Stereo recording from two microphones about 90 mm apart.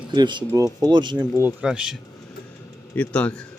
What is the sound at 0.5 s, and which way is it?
Speech, 40° right (ahead or behind).